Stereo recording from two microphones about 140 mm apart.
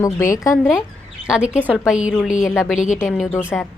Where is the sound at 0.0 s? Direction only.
20° left (ahead or behind).